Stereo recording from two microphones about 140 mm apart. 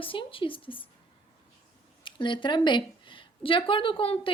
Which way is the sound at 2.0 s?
35° left (ahead or behind).